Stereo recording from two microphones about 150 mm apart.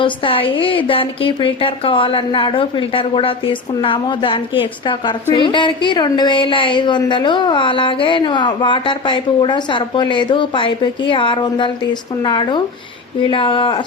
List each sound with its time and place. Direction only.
0.0 s a woman's voice: 35° left (ahead or behind)